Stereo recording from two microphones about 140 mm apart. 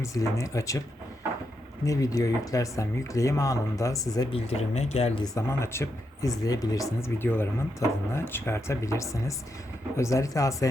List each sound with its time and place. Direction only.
0.0 s speech: 20° left (ahead or behind)
1.8 s speech: 25° left (ahead or behind)
4.3 s speech: 50° left (ahead or behind)
5.2 s speech: 20° left (ahead or behind)